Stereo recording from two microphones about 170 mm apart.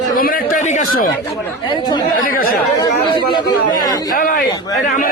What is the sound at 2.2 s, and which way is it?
Speech, 60° left (ahead or behind).